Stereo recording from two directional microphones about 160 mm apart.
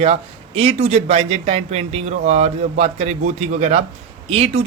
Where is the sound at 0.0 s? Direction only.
40° right (ahead or behind).